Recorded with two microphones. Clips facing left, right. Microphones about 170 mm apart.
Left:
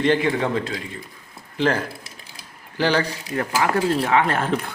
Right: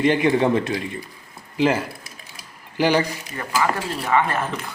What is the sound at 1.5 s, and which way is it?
Speech, 10° right (ahead or behind).